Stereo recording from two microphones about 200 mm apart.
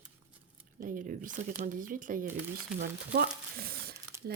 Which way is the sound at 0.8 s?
45° right (ahead or behind).